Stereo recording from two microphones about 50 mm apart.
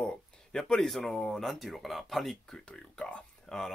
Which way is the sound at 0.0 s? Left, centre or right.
Centre.